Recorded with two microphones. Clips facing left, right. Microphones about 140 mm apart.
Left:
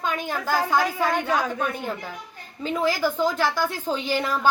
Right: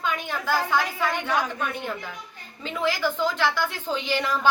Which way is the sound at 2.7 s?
40° left (ahead or behind).